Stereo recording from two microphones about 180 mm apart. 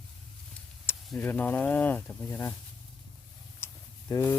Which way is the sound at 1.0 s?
10° left (ahead or behind).